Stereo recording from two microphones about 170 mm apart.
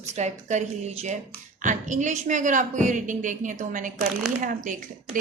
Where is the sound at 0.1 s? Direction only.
40° right (ahead or behind).